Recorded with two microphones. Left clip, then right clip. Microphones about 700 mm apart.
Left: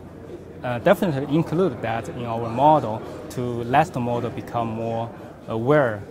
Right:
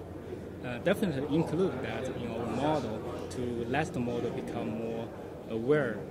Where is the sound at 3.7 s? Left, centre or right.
Left.